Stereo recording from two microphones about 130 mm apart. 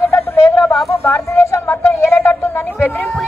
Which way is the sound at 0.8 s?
20° left (ahead or behind).